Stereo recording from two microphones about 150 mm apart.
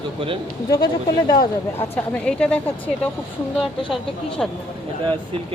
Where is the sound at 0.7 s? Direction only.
30° left (ahead or behind).